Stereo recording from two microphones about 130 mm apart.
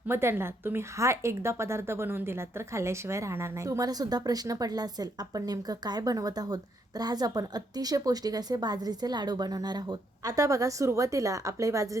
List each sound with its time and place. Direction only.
0.1 s speech: 20° right (ahead or behind)